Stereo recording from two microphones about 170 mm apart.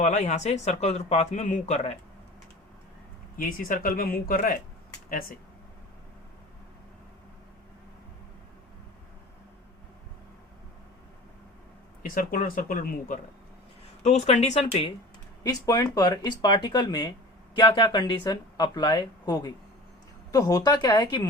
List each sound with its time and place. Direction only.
0.0 s speech: 45° left (ahead or behind)
3.3 s speech: 55° left (ahead or behind)
12.0 s speech: 55° left (ahead or behind)
14.0 s speech: 40° left (ahead or behind)
15.4 s speech: 20° left (ahead or behind)